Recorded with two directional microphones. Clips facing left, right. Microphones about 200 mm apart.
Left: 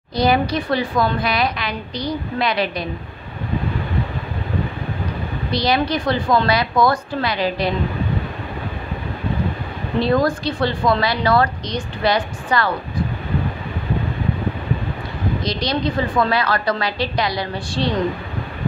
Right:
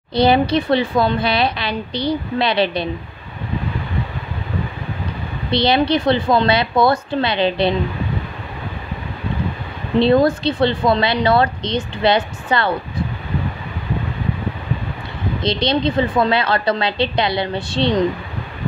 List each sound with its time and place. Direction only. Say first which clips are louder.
0.1 s a woman's voice: right 3 dB; 30° right (ahead or behind)
5.5 s a woman's voice: right 4 dB; 25° right (ahead or behind)
9.9 s a woman's voice: right 4 dB; 25° right (ahead or behind)
15.4 s a woman's voice: right 5 dB; 25° right (ahead or behind)